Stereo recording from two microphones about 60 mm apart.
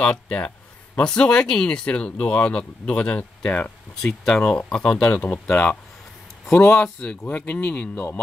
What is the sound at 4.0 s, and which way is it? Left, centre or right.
Speech, centre.